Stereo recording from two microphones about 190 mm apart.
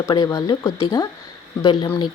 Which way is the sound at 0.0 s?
20° left (ahead or behind).